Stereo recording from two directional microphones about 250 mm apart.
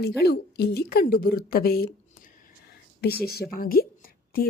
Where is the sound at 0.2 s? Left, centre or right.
Left.